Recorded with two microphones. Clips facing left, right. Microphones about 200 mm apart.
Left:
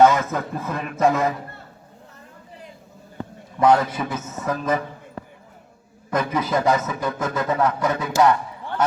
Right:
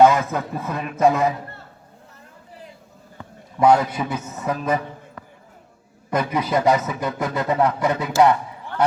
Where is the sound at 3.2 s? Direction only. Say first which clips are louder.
Left 8 dB; 35° left (ahead or behind).